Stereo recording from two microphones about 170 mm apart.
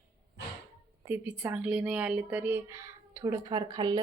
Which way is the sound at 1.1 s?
5° right (ahead or behind).